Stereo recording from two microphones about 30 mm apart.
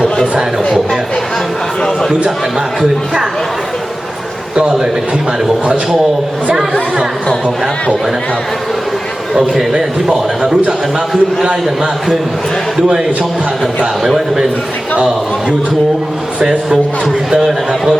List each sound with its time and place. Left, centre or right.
5.6 s a man's voice: right
9.7 s a man's voice: centre